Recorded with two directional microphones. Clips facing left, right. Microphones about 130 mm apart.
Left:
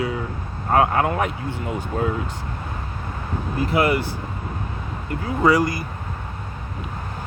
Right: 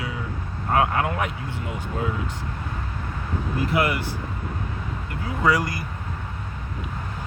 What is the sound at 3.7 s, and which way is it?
Speech, 30° left (ahead or behind).